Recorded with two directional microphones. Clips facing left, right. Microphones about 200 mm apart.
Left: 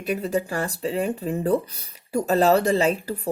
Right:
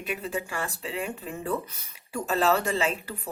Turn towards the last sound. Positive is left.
turn(degrees=35)  # may be behind; listen again after turning